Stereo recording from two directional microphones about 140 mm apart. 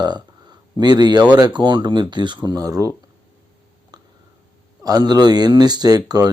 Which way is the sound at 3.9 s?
30° right (ahead or behind).